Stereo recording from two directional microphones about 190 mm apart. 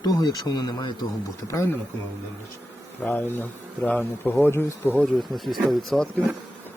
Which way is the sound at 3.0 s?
10° left (ahead or behind).